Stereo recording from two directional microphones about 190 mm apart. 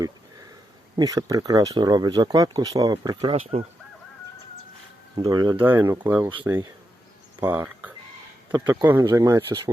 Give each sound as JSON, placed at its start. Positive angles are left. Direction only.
{"t": 0.9, "sound": "speech", "side_deg": -20}
{"t": 5.1, "sound": "speech", "side_deg": -20}